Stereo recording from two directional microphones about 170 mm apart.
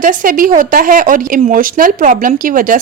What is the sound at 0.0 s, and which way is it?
A woman's voice, 50° right (ahead or behind).